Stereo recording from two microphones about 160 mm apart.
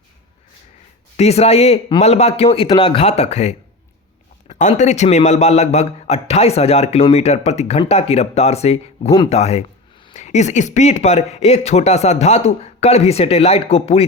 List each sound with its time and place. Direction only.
1.1 s a man's voice: 40° left (ahead or behind)
3.0 s a man's voice: 40° left (ahead or behind)